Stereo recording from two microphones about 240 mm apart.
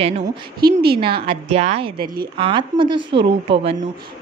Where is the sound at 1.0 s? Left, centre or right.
Right.